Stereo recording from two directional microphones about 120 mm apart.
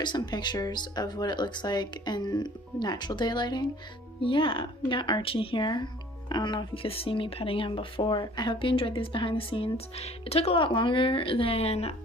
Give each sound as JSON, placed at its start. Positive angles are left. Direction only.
{"t": 0.0, "sound": "speech", "side_deg": 35}